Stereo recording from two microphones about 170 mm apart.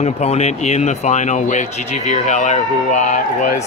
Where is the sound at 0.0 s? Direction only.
40° left (ahead or behind).